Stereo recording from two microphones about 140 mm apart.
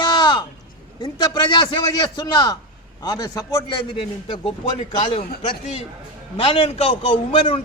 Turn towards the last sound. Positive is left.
turn(degrees=40)  # may be behind; listen again after turning